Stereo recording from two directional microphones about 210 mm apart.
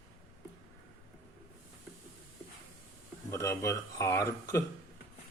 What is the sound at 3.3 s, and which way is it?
A man's voice, 15° left (ahead or behind).